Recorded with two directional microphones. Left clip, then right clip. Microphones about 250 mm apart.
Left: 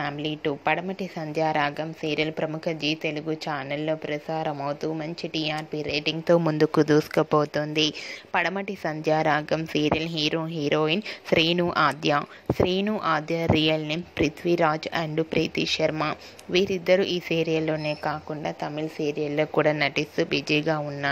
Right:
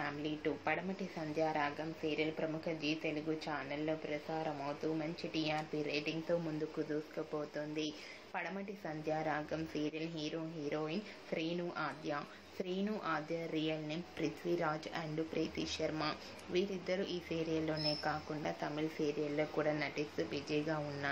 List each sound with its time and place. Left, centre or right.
0.0 s a woman's voice: left
6.2 s speech: left